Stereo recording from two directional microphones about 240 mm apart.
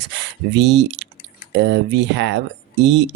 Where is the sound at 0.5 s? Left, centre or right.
Right.